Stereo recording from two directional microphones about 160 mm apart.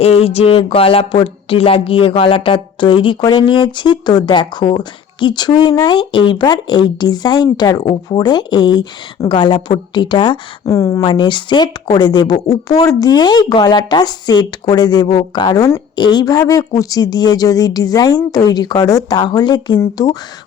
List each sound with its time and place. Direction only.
0.0 s speech: 40° left (ahead or behind); by 11.0 s 20° left (ahead or behind)
11.0 s speech: 30° left (ahead or behind)